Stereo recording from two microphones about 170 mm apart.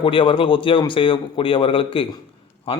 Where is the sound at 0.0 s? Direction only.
30° left (ahead or behind).